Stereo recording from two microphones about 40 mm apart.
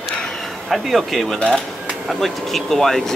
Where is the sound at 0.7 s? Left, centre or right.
Centre.